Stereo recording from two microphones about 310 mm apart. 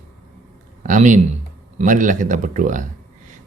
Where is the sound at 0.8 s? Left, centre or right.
Right.